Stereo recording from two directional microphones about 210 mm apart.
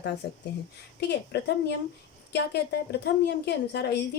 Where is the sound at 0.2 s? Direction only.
55° left (ahead or behind).